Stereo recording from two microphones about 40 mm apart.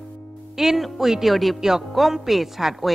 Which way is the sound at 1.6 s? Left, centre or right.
Centre.